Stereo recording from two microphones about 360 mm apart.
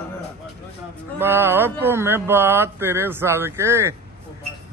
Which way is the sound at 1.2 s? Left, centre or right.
Centre.